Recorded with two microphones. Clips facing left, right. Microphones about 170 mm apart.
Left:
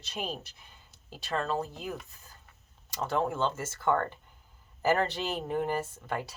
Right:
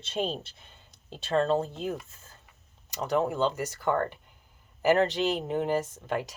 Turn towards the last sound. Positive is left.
turn(degrees=-15)  # may be behind; listen again after turning